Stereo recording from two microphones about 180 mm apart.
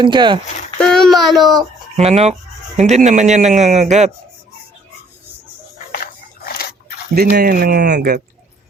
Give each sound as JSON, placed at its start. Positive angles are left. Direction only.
{"t": 0.0, "sound": "speech", "side_deg": -25}
{"t": 0.8, "sound": "speech", "side_deg": 5}
{"t": 2.0, "sound": "speech", "side_deg": -35}
{"t": 5.9, "sound": "a sound", "side_deg": 55}
{"t": 7.2, "sound": "speech", "side_deg": -60}